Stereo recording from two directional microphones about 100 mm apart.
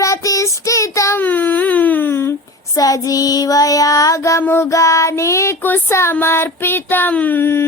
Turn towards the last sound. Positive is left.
turn(degrees=25)  # may be behind; listen again after turning